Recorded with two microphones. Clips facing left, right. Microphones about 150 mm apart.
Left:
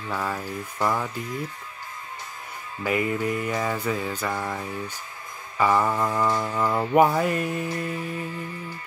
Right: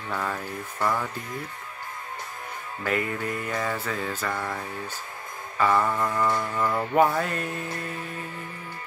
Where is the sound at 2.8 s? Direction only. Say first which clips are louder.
Left 3 dB; 10° left (ahead or behind).